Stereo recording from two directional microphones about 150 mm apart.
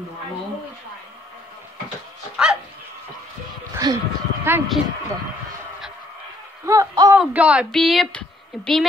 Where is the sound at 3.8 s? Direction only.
25° right (ahead or behind).